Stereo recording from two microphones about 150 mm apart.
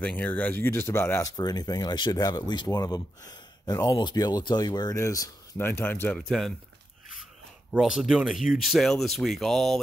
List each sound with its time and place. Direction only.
0.0 s speech: 10° left (ahead or behind)
1.3 s speech: 25° left (ahead or behind); by 6.1 s 10° left (ahead or behind)
6.1 s speech: centre (ahead or behind)
7.7 s speech: 5° right (ahead or behind)